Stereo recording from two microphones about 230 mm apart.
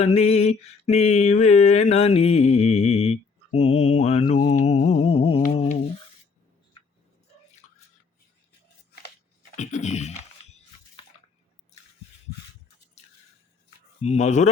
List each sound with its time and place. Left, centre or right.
0.0 s mantra: left
4.6 s humming: left
9.6 s a sound: left
14.0 s speech: left